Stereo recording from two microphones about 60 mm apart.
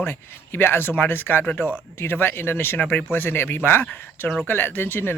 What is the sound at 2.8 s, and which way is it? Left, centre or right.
Speech, left.